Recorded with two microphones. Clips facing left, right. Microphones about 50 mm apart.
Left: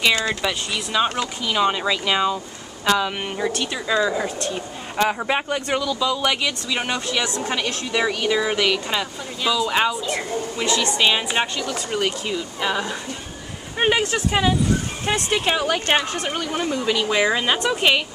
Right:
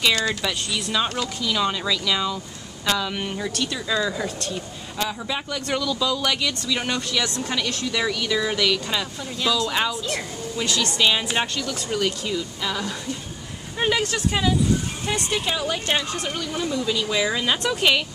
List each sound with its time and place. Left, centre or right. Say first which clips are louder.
0.0 s speech: left 2 dB; left
5.7 s speech: even; centre
15.0 s speech: left 5 dB; left